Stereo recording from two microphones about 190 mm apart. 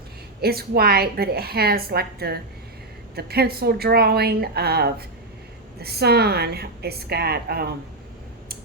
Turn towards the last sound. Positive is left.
turn(degrees=-55)  # may be behind; listen again after turning